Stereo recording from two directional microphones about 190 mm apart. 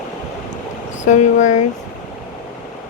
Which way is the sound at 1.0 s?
40° left (ahead or behind).